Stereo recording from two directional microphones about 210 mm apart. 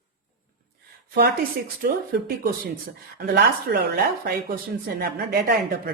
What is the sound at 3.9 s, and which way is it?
A woman's voice, 45° right (ahead or behind).